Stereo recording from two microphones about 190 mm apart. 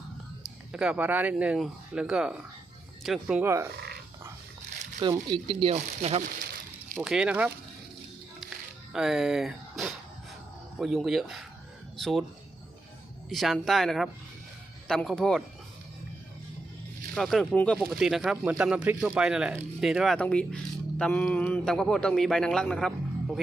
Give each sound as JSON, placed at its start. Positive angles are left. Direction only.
{"t": 0.7, "sound": "speech", "side_deg": -5}
{"t": 5.1, "sound": "speech", "side_deg": -25}
{"t": 6.2, "sound": "a sound", "side_deg": -50}
{"t": 6.9, "sound": "speech", "side_deg": -5}
{"t": 8.4, "sound": "music", "side_deg": 0}
{"t": 10.8, "sound": "speech", "side_deg": 0}
{"t": 13.3, "sound": "speech", "side_deg": 0}
{"t": 17.2, "sound": "speech", "side_deg": 0}